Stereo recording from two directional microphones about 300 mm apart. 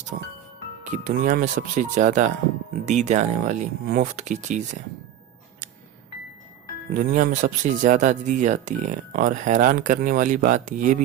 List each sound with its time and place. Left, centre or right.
0.1 s speech: right
6.9 s speech: right